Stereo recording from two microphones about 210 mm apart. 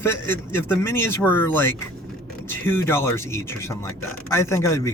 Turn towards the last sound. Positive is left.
turn(degrees=15)  # may be behind; listen again after turning